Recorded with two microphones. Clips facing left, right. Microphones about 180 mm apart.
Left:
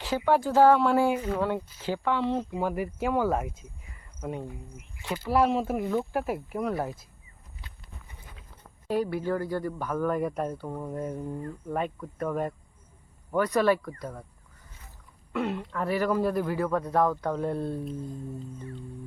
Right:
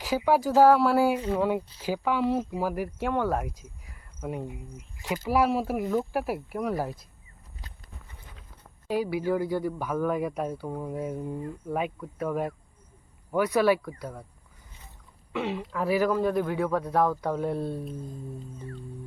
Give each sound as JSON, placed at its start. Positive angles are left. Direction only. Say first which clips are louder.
{"t": 0.3, "sound": "speech", "louder": "right 1 dB", "side_deg": -5}
{"t": 7.6, "sound": "walk", "louder": "right 1 dB", "side_deg": -40}
{"t": 8.9, "sound": "speech", "louder": "right 1 dB", "side_deg": -5}
{"t": 15.3, "sound": "speech", "louder": "even", "side_deg": 0}